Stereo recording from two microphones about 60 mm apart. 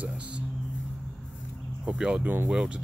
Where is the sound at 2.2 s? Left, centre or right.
Right.